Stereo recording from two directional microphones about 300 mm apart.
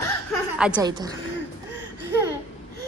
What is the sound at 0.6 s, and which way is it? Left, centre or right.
Speech, centre.